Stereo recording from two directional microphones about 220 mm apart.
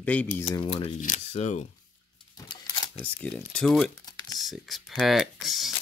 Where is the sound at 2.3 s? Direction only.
20° left (ahead or behind).